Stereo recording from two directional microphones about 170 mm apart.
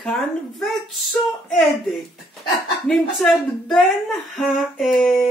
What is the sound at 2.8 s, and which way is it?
Speech, centre (ahead or behind).